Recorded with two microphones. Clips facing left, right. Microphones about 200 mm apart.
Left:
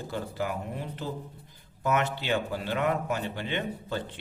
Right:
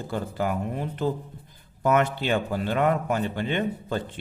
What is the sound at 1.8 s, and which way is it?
A man's voice, 50° right (ahead or behind).